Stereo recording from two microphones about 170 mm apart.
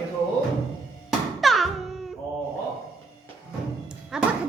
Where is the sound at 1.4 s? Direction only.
Centre (ahead or behind).